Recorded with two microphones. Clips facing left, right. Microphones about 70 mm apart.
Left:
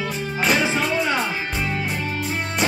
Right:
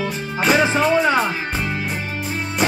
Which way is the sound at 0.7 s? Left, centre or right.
Right.